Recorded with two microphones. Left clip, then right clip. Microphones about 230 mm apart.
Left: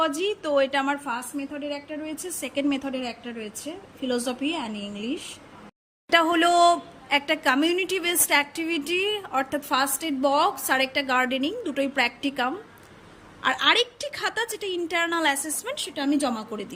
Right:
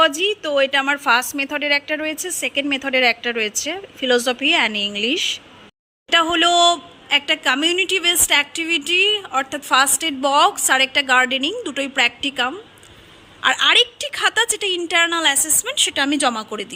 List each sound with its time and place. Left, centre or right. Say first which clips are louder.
0.2 s a woman's voice: right 5 dB; centre
1.0 s a woman's voice: right 14 dB; right
2.0 s a woman's voice: right 10 dB; centre
3.0 s a woman's voice: right 16 dB; right
3.5 s a woman's voice: right 12 dB; centre